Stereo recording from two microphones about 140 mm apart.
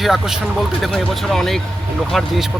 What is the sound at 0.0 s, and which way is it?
Speech, centre (ahead or behind).